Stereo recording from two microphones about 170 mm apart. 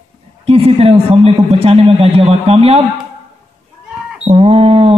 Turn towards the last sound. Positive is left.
turn(degrees=-40)  # may be behind; listen again after turning